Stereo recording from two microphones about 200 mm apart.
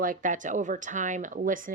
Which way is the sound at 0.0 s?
40° right (ahead or behind).